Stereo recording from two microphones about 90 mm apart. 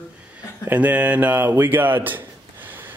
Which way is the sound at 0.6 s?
20° right (ahead or behind).